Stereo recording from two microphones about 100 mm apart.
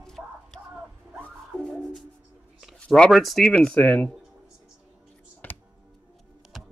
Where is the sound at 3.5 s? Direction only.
10° left (ahead or behind).